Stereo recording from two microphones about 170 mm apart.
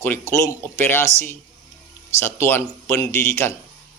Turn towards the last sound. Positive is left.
turn(degrees=15)  # may be behind; listen again after turning